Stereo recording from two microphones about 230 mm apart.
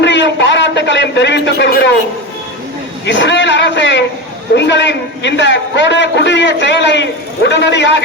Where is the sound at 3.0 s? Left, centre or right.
Left.